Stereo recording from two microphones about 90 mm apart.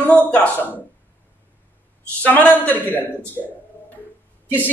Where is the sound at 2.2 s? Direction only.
20° left (ahead or behind).